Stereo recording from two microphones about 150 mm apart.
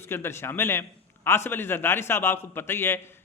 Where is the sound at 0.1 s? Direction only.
15° left (ahead or behind).